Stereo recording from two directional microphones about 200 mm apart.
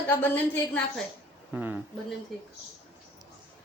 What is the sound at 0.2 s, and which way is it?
Speech, 10° left (ahead or behind).